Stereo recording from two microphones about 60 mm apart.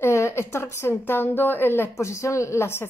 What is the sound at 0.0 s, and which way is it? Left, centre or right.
Speech, left.